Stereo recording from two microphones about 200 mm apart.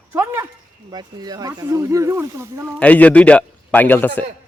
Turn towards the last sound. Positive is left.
turn(degrees=10)  # may be behind; listen again after turning